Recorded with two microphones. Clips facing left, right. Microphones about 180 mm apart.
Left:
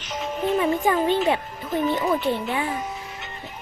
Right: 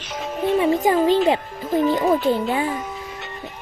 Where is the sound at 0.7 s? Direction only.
40° right (ahead or behind).